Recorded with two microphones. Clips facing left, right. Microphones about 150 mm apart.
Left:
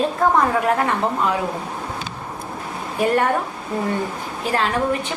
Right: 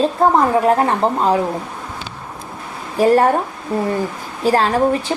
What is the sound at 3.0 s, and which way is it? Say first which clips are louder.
Speech: right 6 dB; 35° right (ahead or behind).